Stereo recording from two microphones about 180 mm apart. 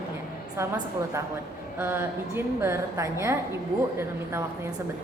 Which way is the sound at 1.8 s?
15° right (ahead or behind).